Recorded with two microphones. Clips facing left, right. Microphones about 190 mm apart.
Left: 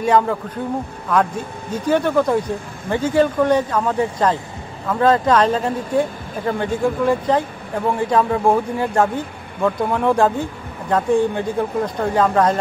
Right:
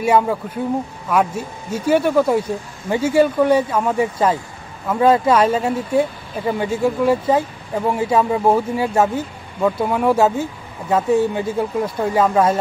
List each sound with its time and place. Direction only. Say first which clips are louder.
0.0 s speech: even; 10° right (ahead or behind)